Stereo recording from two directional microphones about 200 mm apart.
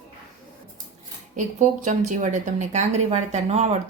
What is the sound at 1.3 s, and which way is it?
Speech, 35° right (ahead or behind).